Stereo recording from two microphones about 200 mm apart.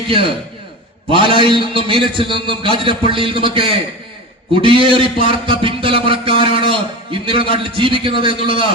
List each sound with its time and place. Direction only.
1.1 s a man's voice: 25° right (ahead or behind)